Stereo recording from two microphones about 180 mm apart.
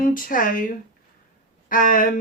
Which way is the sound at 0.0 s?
50° left (ahead or behind).